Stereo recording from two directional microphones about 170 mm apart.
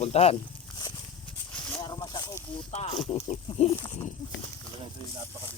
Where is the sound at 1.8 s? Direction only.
25° left (ahead or behind).